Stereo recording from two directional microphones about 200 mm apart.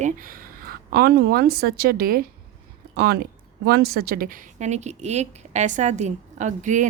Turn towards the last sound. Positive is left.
turn(degrees=-40)  # may be behind; listen again after turning